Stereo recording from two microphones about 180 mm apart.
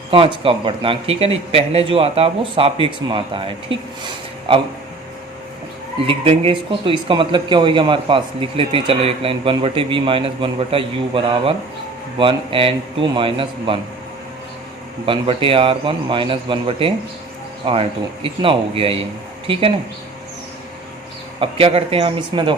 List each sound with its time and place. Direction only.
0.1 s speech: 30° right (ahead or behind)
6.1 s speech: 30° right (ahead or behind)
15.0 s speech: 30° right (ahead or behind)
21.4 s speech: 30° right (ahead or behind)